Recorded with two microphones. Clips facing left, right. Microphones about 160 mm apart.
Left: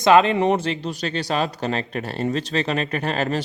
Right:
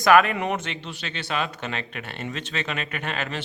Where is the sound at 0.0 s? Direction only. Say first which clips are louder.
Left 3 dB; 25° left (ahead or behind).